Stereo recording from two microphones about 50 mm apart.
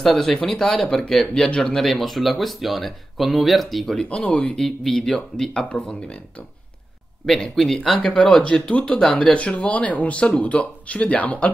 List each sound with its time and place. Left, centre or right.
0.0 s speech: centre
1.9 s speech: centre
3.9 s speech: centre
4.2 s speech: left
4.6 s speech: centre
7.2 s speech: centre
8.6 s speech: left